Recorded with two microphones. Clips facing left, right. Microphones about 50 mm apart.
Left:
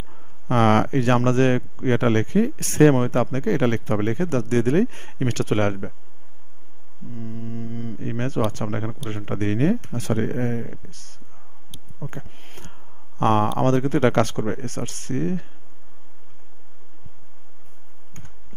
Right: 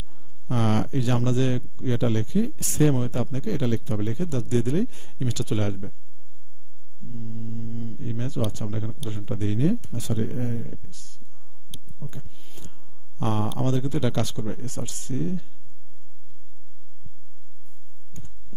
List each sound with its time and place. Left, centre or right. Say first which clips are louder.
0.0 s speech: left 6 dB; left
7.1 s mantra: left 4 dB; left
8.5 s speech: left 5 dB; left
12.0 s a sound: left 6 dB; left
13.6 s speech: left 7 dB; left